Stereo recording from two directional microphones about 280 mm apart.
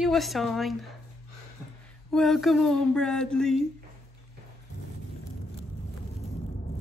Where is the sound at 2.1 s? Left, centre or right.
Centre.